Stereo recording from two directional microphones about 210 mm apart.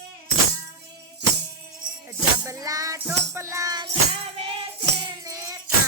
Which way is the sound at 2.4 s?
15° right (ahead or behind).